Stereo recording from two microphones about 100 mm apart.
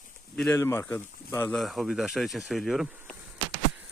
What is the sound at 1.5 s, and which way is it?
Speech, centre (ahead or behind).